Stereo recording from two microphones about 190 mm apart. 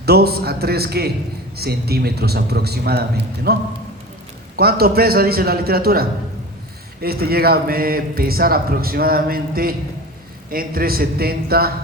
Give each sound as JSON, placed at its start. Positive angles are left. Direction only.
{"t": 0.0, "sound": "a man's voice", "side_deg": -55}